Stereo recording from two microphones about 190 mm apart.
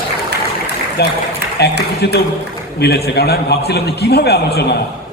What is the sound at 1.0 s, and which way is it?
A man's voice, 60° left (ahead or behind).